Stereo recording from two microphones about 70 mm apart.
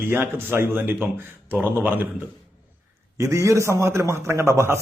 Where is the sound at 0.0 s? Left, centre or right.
Right.